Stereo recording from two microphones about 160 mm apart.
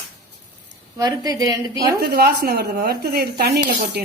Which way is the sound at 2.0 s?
75° right (ahead or behind).